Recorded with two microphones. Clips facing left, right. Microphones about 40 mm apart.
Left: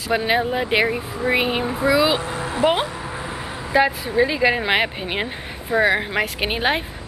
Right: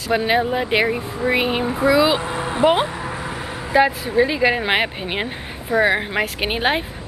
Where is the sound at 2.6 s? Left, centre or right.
Centre.